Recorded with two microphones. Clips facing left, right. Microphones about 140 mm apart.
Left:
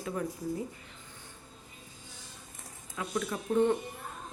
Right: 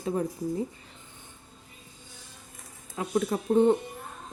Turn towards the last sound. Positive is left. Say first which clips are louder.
# right 5 dB
turn(degrees=-30)  # may be behind; listen again after turning